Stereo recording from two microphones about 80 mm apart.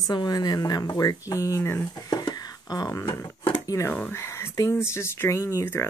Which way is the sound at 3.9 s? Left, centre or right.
Left.